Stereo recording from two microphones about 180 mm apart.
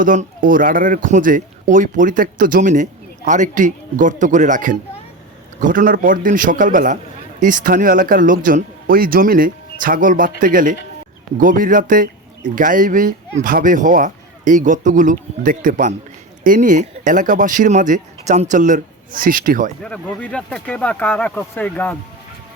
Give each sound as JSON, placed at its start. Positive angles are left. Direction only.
{"t": 0.0, "sound": "speech", "side_deg": -50}
{"t": 19.8, "sound": "speech", "side_deg": 5}